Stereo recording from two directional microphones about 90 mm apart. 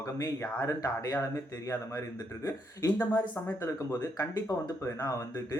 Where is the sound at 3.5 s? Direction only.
30° left (ahead or behind).